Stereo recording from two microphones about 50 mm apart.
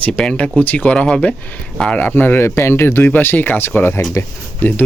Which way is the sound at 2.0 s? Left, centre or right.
Left.